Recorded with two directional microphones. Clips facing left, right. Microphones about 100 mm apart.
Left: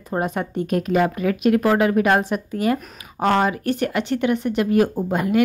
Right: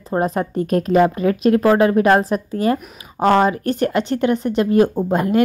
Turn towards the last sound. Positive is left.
turn(degrees=-35)  # may be behind; listen again after turning